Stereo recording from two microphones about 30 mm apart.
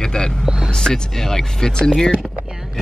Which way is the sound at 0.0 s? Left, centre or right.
Left.